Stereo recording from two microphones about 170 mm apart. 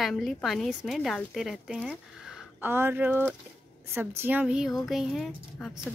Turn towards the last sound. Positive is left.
turn(degrees=0)  # may be behind; listen again after turning